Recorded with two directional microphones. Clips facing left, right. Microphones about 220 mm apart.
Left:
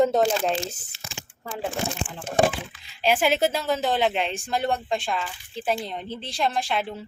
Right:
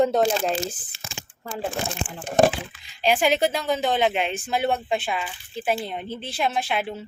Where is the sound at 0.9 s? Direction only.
50° right (ahead or behind).